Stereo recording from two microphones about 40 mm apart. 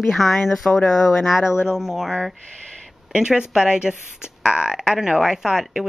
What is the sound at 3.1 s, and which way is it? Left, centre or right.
Speech, right.